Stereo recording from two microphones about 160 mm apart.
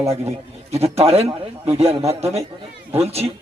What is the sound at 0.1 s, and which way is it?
A man's voice, 40° right (ahead or behind).